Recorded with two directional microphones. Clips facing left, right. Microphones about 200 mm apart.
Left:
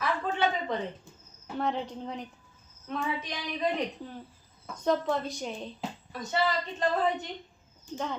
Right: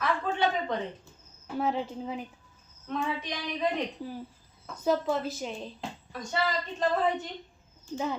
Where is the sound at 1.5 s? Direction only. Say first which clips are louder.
Right 2 dB; 5° right (ahead or behind).